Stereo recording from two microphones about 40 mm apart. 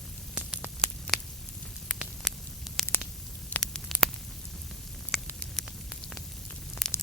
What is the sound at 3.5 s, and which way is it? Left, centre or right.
Static, left.